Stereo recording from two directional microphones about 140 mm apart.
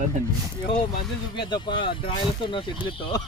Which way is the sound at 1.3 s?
35° left (ahead or behind).